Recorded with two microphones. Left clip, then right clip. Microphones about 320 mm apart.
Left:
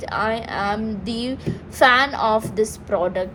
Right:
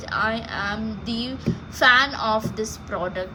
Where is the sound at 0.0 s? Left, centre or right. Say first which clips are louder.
Left 2 dB; centre.